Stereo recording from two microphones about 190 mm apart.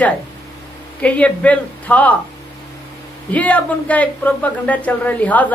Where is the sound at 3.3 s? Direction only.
10° left (ahead or behind).